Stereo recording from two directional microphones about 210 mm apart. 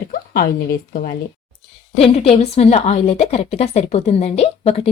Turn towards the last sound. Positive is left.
turn(degrees=30)  # may be behind; listen again after turning